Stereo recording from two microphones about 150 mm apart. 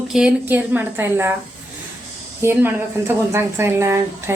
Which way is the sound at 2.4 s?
15° right (ahead or behind).